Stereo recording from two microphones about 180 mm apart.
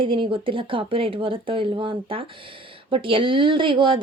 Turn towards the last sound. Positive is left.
turn(degrees=-30)  # may be behind; listen again after turning